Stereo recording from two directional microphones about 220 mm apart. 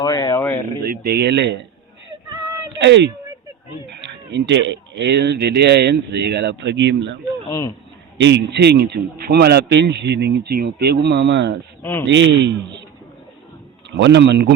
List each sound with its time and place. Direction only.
0.0 s a sound: 15° left (ahead or behind)
0.9 s speech: 45° right (ahead or behind)
2.7 s speech: 50° right (ahead or behind)
8.2 s speech: 50° right (ahead or behind)
11.8 s speech: 10° left (ahead or behind)
12.0 s speech: 55° right (ahead or behind)
13.9 s speech: 50° right (ahead or behind)